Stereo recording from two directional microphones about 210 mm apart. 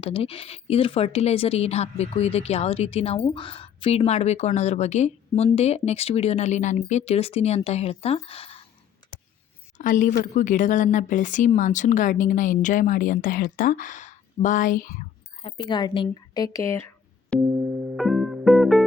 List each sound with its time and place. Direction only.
0.0 s speech: 25° left (ahead or behind)
9.7 s a woman's voice: 40° left (ahead or behind); by 17.4 s 10° left (ahead or behind)
17.9 s music: centre (ahead or behind)